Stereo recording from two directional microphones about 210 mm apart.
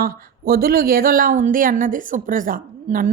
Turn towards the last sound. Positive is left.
turn(degrees=-40)  # may be behind; listen again after turning